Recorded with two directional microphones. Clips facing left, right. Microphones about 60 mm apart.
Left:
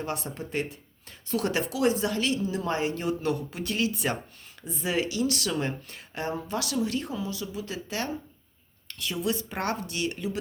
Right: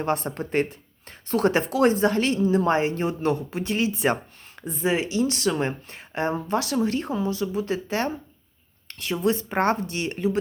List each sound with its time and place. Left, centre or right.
0.0 s speech: right